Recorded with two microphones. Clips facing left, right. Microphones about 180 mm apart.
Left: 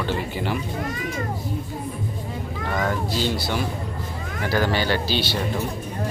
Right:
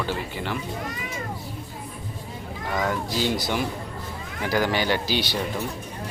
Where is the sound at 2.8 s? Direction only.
10° right (ahead or behind).